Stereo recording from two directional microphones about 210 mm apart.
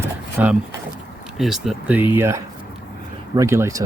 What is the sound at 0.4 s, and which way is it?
Speech, 10° right (ahead or behind).